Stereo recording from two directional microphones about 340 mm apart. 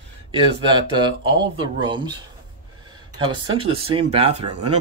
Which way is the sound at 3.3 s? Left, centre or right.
Centre.